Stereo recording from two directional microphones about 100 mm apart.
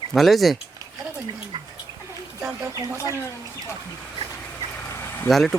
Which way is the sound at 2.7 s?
35° right (ahead or behind).